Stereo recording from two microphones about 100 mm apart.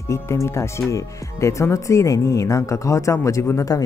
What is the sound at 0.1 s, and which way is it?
Speech, 30° left (ahead or behind).